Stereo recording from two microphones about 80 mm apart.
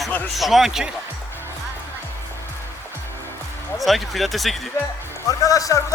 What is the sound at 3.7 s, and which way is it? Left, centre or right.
Speech, centre.